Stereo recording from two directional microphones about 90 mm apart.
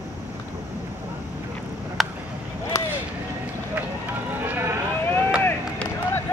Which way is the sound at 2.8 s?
35° left (ahead or behind).